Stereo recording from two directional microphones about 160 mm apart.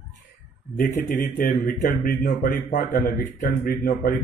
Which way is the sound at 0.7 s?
50° left (ahead or behind).